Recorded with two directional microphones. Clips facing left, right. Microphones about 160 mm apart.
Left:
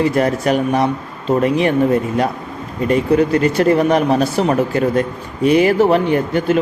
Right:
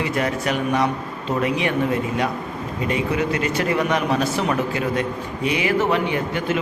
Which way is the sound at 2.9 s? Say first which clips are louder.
Left 9 dB; 40° left (ahead or behind).